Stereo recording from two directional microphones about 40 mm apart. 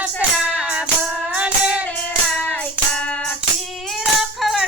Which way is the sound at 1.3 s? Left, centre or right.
Right.